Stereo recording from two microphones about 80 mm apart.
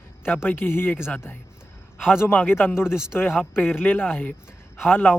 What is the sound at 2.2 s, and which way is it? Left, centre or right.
Speech, left.